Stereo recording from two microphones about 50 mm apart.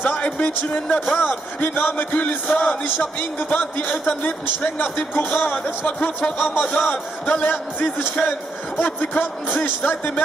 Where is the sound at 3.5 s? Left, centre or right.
Left.